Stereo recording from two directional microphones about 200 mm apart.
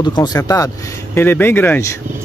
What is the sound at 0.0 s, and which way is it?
Speech, 20° left (ahead or behind).